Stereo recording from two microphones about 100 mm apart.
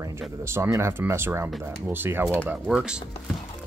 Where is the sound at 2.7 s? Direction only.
10° right (ahead or behind).